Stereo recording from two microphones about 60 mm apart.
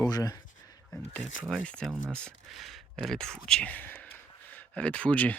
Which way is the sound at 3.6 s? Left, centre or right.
Left.